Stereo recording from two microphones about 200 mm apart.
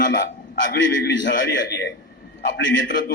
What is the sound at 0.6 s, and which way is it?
A man's voice, 60° left (ahead or behind).